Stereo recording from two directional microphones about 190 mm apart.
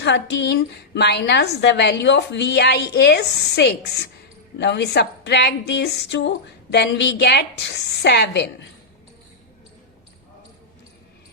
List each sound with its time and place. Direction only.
0.0 s speech: 65° left (ahead or behind)